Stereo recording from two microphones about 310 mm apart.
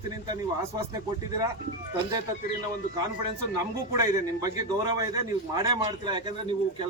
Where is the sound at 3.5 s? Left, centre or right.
Centre.